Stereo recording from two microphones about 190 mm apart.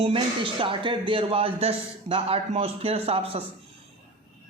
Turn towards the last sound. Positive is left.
turn(degrees=-30)  # may be behind; listen again after turning